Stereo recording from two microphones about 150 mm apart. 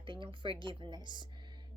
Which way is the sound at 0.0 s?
35° right (ahead or behind).